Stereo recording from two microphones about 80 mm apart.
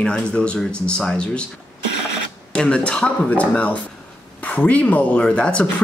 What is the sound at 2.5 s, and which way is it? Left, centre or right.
Speech, centre.